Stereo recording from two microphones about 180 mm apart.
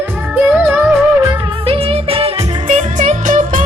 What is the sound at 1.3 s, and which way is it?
Music, 30° right (ahead or behind).